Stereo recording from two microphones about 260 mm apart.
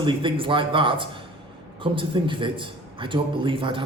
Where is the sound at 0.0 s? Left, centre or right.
Centre.